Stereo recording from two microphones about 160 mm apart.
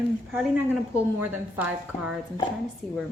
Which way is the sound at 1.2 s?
10° right (ahead or behind).